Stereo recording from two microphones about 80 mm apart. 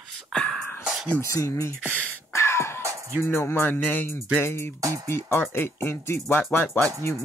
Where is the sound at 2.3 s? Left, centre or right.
Left.